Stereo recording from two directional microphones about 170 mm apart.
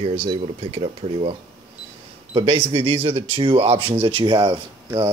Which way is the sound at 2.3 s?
30° right (ahead or behind).